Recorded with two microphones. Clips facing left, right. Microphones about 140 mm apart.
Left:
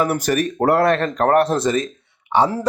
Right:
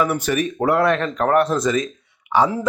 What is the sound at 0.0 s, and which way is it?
Speech, 40° left (ahead or behind).